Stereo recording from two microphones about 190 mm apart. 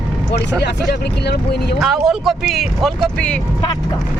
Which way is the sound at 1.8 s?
Centre (ahead or behind).